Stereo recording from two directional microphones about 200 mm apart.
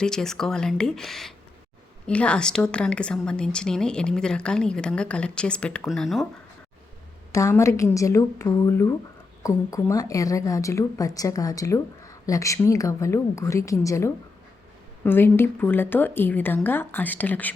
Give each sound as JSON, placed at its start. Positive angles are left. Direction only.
{"t": 0.0, "sound": "a woman's voice", "side_deg": 5}
{"t": 7.3, "sound": "a woman's voice", "side_deg": 15}